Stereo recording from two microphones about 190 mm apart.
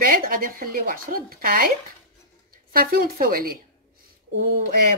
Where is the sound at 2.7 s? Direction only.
50° right (ahead or behind).